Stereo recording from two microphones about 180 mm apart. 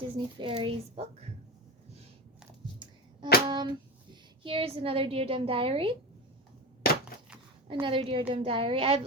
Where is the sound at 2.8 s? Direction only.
25° right (ahead or behind).